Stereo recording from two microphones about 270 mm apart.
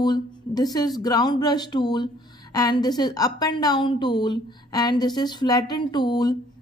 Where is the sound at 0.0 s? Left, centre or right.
Centre.